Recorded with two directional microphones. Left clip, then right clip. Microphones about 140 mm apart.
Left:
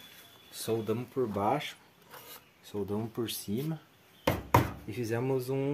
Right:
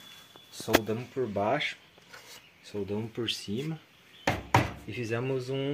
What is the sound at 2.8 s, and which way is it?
Speech, 10° left (ahead or behind).